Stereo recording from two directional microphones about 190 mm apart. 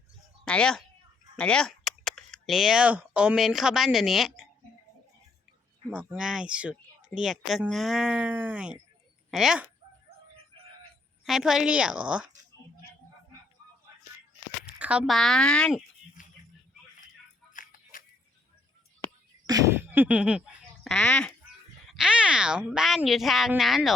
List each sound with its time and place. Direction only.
0.4 s speech: 5° left (ahead or behind)
5.9 s speech: 5° right (ahead or behind)
11.3 s speech: 5° right (ahead or behind)
14.8 s speech: 5° right (ahead or behind)
16.2 s music: 45° left (ahead or behind)
17.5 s music: 45° left (ahead or behind)
19.5 s duck: 15° right (ahead or behind); by 21.3 s 5° left (ahead or behind)
21.8 s speech: 5° right (ahead or behind)